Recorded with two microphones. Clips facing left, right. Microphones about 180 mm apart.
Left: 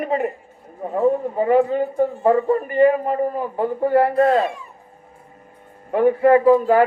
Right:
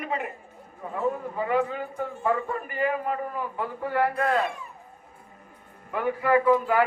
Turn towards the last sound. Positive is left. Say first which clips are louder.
# left 7 dB
turn(degrees=35)  # may be behind; listen again after turning